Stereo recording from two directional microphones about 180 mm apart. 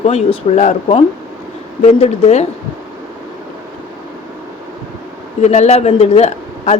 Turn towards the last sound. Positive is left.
turn(degrees=35)  # may be behind; listen again after turning